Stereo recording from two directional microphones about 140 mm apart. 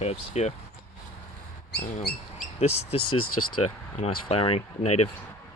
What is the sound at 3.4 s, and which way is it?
Speech, 40° left (ahead or behind).